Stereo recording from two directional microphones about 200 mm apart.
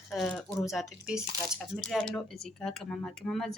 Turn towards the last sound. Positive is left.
turn(degrees=0)  # may be behind; listen again after turning